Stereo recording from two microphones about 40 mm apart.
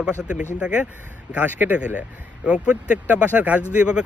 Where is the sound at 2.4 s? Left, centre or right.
Right.